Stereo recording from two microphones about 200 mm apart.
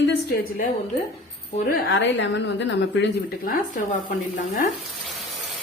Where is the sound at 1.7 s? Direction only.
65° left (ahead or behind).